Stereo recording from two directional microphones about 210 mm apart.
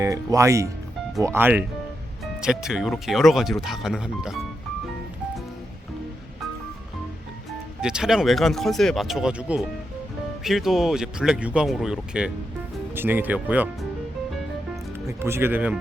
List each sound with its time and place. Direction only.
0.0 s speech: 15° right (ahead or behind)
7.8 s speech: 5° right (ahead or behind)
15.0 s speech: 10° right (ahead or behind)